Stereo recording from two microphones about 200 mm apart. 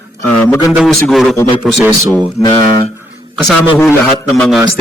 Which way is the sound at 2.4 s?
20° left (ahead or behind).